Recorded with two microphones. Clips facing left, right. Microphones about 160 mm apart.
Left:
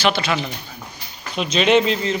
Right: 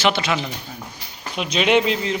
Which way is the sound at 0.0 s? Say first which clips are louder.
Even; 20° right (ahead or behind).